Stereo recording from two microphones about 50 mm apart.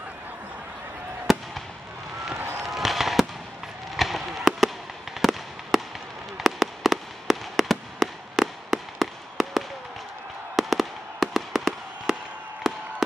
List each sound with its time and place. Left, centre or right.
1.2 s fireworks: centre
2.3 s fireworks: right
2.7 s fireworks: centre
3.9 s chop: centre
5.2 s fireworks: centre
12.6 s chop: centre